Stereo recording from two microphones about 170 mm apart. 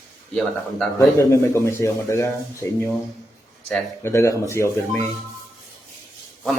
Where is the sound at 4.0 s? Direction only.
15° left (ahead or behind).